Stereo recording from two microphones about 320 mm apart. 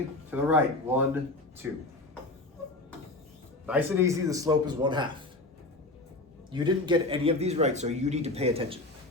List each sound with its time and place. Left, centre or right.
0.3 s speech: centre
3.7 s a man's voice: centre
6.5 s a man's voice: centre